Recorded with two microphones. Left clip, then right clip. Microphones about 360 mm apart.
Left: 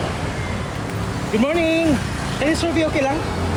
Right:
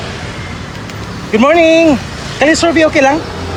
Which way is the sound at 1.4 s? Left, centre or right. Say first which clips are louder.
Right 12 dB; centre.